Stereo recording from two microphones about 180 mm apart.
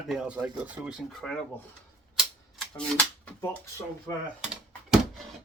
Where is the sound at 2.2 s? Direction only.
Centre (ahead or behind).